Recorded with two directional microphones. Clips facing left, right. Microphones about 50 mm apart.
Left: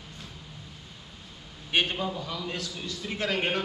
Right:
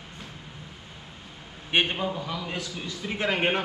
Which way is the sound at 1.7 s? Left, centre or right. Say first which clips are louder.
Right 2 dB; right.